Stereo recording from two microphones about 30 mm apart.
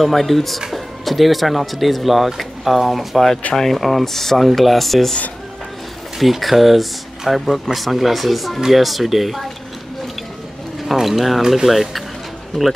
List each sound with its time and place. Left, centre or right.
0.1 s speech: centre
6.1 s speech: centre
11.0 s speech: centre
11.4 s speech: centre